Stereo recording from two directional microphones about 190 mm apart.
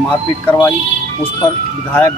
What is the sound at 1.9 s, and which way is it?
Speech, 15° left (ahead or behind).